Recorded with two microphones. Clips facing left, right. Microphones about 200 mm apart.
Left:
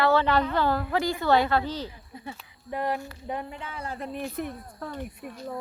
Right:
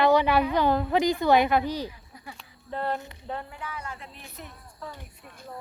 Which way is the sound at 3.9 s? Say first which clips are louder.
Left 13 dB; 50° left (ahead or behind).